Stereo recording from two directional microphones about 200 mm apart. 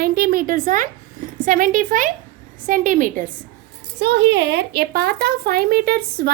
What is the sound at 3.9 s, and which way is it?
Speech, 55° right (ahead or behind).